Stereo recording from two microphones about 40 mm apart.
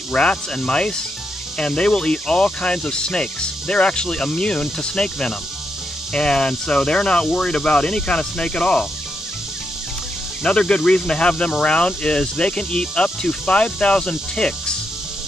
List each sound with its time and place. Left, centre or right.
0.1 s speech: left
10.4 s speech: left